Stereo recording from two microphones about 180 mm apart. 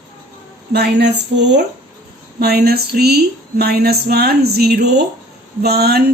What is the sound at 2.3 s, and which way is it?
A woman's voice, 60° right (ahead or behind).